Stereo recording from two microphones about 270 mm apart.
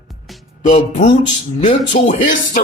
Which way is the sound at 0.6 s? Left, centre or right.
Left.